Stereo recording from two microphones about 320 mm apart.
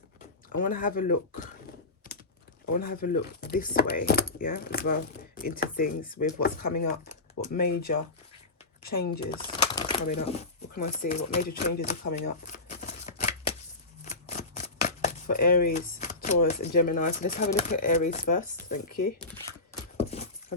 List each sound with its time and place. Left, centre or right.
0.5 s speech: left
2.7 s speech: left
9.2 s speech: centre
14.0 s scissors: left
17.7 s speech: left
20.0 s a sound: centre